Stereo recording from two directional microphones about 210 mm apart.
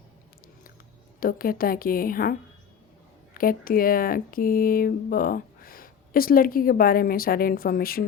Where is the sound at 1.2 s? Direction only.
45° left (ahead or behind).